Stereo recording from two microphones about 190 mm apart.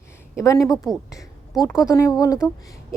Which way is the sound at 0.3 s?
15° left (ahead or behind).